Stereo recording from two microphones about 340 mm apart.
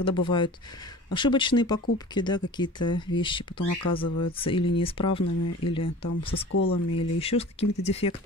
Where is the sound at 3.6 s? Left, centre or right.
Left.